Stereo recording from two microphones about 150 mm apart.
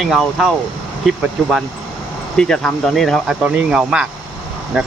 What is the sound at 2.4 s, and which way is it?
Speech, 5° left (ahead or behind).